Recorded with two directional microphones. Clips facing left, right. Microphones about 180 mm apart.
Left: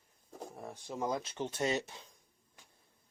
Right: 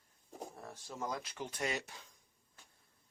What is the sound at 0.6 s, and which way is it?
Speech, 20° left (ahead or behind).